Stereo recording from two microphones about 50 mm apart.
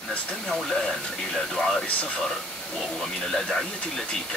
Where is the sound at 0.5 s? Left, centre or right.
Centre.